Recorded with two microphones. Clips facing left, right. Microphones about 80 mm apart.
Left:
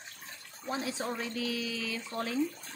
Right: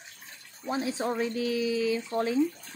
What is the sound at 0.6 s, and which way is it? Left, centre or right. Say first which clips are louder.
Speech: right 5 dB; right.